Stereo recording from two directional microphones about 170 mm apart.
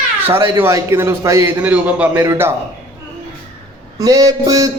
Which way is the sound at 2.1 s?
20° right (ahead or behind).